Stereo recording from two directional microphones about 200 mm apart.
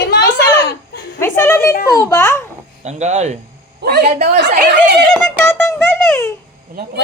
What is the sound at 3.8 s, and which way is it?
Speech, 55° right (ahead or behind).